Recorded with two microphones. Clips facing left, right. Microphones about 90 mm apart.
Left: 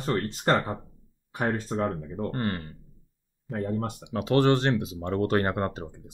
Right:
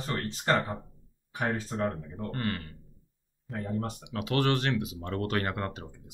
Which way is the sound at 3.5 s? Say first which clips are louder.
Left 4 dB; 40° left (ahead or behind).